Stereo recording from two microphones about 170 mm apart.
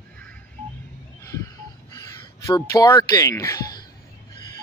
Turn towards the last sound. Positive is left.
turn(degrees=15)  # may be behind; listen again after turning